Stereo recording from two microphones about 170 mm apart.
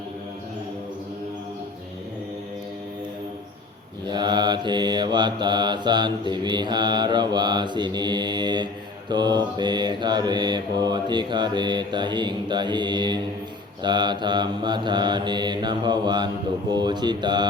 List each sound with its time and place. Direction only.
4.0 s mantra: 25° right (ahead or behind)